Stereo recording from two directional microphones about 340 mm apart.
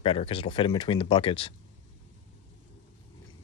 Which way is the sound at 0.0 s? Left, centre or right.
Centre.